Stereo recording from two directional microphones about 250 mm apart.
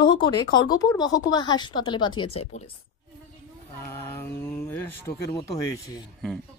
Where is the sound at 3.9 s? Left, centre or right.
Centre.